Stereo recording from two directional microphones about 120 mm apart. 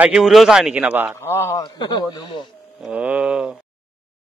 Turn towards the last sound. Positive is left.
turn(degrees=-5)  # may be behind; listen again after turning